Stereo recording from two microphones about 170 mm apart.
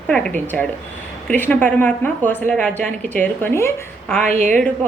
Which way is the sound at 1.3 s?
10° left (ahead or behind).